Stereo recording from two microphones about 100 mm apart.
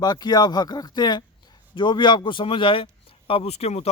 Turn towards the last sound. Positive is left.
turn(degrees=90)